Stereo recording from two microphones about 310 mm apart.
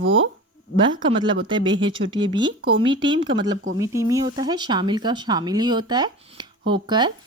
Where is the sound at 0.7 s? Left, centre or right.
Centre.